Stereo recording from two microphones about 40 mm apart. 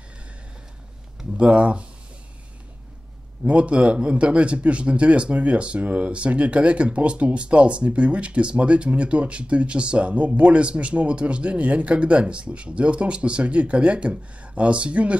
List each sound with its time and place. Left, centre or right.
1.6 s speech: right
3.4 s speech: right